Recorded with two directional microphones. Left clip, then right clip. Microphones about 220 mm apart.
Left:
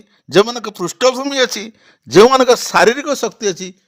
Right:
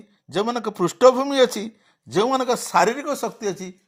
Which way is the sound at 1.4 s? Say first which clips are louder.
Left 2 dB; 50° left (ahead or behind).